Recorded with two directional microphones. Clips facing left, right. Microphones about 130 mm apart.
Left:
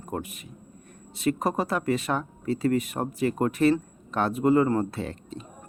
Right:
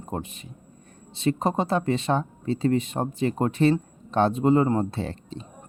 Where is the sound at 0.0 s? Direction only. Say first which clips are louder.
Right 1 dB; 25° right (ahead or behind).